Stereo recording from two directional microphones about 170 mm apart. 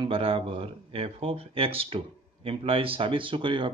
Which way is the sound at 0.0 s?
30° right (ahead or behind).